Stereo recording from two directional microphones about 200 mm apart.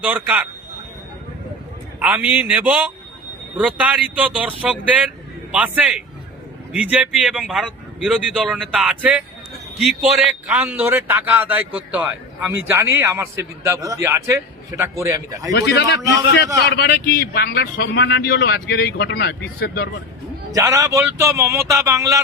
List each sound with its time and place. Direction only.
0.0 s a man's voice: 5° right (ahead or behind)
2.0 s a man's voice: 5° right (ahead or behind)
15.5 s a man's voice: 55° left (ahead or behind)
20.5 s a man's voice: 15° right (ahead or behind)